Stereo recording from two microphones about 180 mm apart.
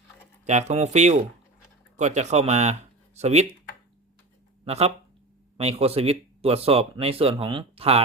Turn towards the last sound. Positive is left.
turn(degrees=-30)  # may be behind; listen again after turning